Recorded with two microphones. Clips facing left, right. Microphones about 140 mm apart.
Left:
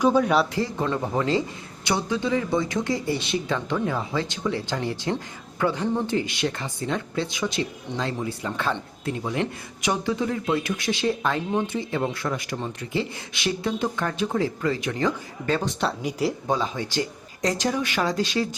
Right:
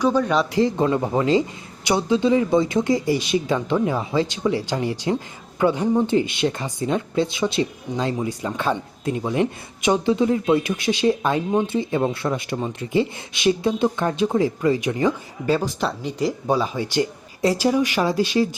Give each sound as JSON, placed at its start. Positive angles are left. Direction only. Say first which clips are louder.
{"t": 0.0, "sound": "speech", "louder": "even", "side_deg": 10}
{"t": 0.5, "sound": "speech", "louder": "right 7 dB", "side_deg": -20}
{"t": 15.4, "sound": "speech", "louder": "right 3 dB", "side_deg": -5}
{"t": 16.5, "sound": "speech", "louder": "right 4 dB", "side_deg": -10}